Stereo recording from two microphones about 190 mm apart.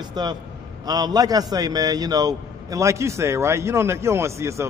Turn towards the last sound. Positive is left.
turn(degrees=-15)  # may be behind; listen again after turning